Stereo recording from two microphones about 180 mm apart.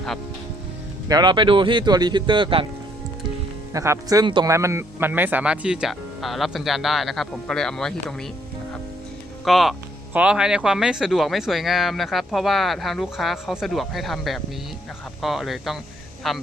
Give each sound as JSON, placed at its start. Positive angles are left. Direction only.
{"t": 1.0, "sound": "speech", "side_deg": -25}
{"t": 3.7, "sound": "speech", "side_deg": -20}
{"t": 9.4, "sound": "speech", "side_deg": 0}